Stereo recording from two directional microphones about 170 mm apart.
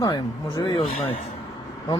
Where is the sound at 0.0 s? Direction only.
25° left (ahead or behind).